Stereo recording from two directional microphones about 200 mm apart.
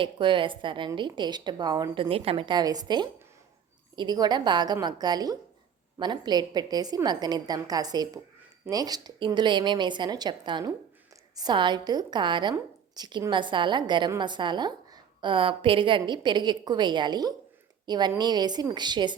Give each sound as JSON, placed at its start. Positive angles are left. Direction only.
{"t": 0.0, "sound": "a woman's voice", "side_deg": -25}